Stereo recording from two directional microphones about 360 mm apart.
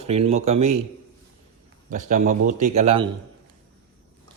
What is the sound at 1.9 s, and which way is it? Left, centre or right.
A man's voice, right.